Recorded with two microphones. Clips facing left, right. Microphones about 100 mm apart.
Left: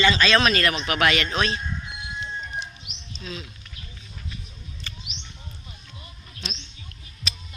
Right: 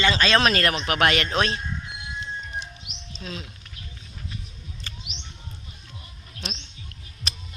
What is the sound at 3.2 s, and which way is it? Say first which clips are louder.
Speech: even; 50° right (ahead or behind).